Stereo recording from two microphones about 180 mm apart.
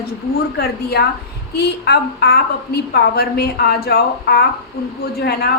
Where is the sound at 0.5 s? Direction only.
60° left (ahead or behind).